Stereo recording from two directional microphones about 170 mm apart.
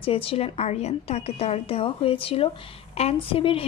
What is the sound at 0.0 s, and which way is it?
A woman's voice, 35° left (ahead or behind).